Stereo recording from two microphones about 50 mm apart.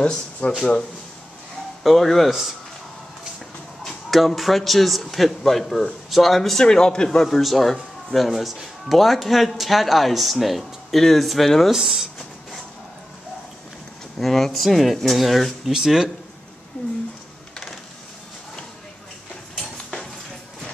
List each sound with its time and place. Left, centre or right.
0.0 s speech: left
1.8 s speech: centre
3.8 s speech: centre
6.6 s speech: centre
14.2 s speech: centre
19.5 s a sound: centre